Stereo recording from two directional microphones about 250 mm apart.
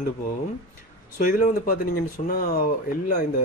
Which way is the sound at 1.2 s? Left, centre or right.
Left.